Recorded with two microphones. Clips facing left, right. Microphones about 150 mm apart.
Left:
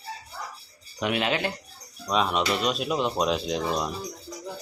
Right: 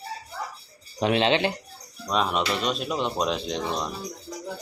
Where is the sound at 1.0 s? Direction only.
30° right (ahead or behind).